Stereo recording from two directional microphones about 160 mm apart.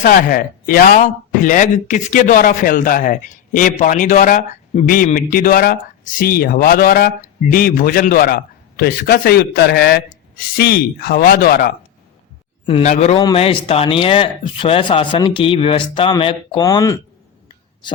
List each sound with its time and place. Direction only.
0.0 s a man's voice: 60° left (ahead or behind)
12.8 s a man's voice: 45° left (ahead or behind)
13.1 s speech: 35° left (ahead or behind)